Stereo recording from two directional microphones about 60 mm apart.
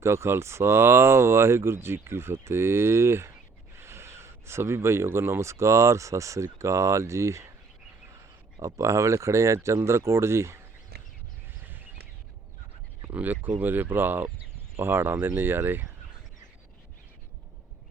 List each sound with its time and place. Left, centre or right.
0.0 s speech: right
8.6 s speech: right
13.1 s speech: right